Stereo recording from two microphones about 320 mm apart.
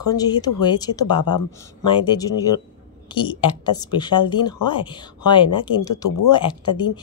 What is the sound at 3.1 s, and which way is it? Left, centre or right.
Speech, centre.